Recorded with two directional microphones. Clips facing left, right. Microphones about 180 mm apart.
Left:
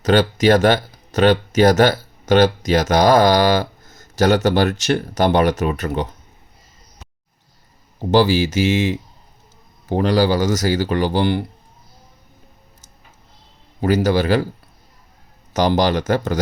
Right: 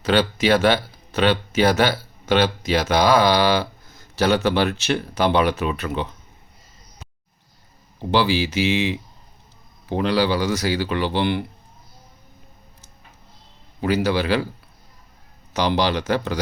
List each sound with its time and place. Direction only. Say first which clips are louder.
0.0 s speech: left 4 dB; 45° left (ahead or behind)
8.1 s speech: left 5 dB; 45° left (ahead or behind)
13.8 s speech: left 4 dB; 45° left (ahead or behind)
15.5 s speech: left 4 dB; 45° left (ahead or behind)